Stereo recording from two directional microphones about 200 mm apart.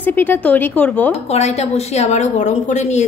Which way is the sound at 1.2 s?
30° left (ahead or behind).